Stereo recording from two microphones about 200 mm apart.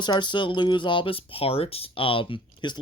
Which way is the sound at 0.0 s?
20° left (ahead or behind).